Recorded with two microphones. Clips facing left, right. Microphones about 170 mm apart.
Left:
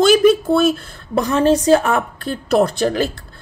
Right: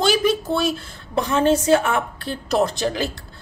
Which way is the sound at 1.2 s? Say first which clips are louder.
Left 3 dB; 40° left (ahead or behind).